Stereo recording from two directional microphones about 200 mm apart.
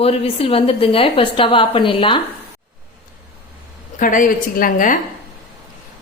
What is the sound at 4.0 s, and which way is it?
Speech, 40° left (ahead or behind).